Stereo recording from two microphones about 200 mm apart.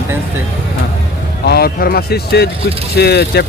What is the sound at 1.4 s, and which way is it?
Speech, 50° left (ahead or behind).